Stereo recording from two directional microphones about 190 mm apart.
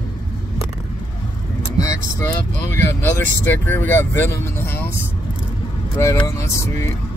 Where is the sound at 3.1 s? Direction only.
10° left (ahead or behind).